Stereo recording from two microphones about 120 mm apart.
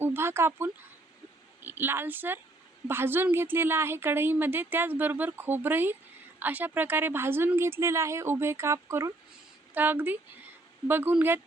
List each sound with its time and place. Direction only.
0.0 s a woman's voice: 20° right (ahead or behind)